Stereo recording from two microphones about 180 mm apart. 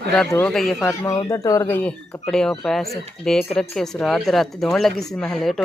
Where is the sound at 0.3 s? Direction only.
10° left (ahead or behind).